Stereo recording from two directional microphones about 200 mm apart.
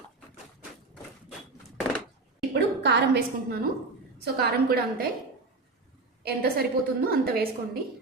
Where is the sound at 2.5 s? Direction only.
55° right (ahead or behind).